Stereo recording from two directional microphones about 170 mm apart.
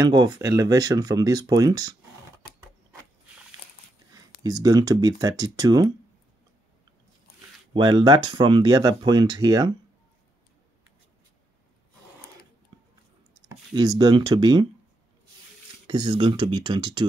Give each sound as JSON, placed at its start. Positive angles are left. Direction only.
{"t": 0.0, "sound": "speech", "side_deg": -20}
{"t": 4.4, "sound": "speech", "side_deg": -20}
{"t": 7.7, "sound": "speech", "side_deg": -25}
{"t": 13.4, "sound": "speech", "side_deg": -25}
{"t": 15.9, "sound": "speech", "side_deg": -30}